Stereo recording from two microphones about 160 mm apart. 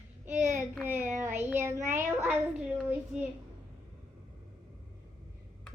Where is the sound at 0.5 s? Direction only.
10° right (ahead or behind).